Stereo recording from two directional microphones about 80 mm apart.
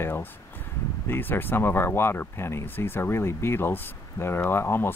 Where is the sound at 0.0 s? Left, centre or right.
Left.